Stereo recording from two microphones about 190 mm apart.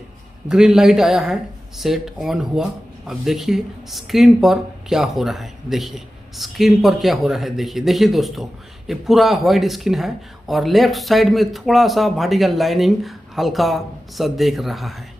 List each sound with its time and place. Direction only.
0.4 s speech: 5° right (ahead or behind)